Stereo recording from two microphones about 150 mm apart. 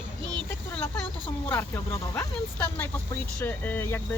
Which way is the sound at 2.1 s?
15° left (ahead or behind).